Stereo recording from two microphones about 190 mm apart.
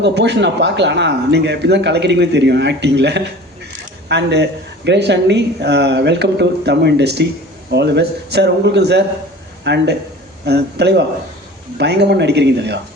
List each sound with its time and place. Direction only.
0.0 s speech: 65° right (ahead or behind)